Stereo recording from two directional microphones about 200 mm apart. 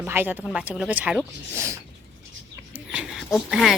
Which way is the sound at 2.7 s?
5° right (ahead or behind).